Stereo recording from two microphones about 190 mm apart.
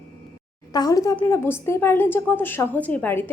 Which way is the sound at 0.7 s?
20° left (ahead or behind).